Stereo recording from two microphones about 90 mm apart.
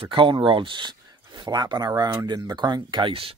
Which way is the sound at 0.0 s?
70° right (ahead or behind).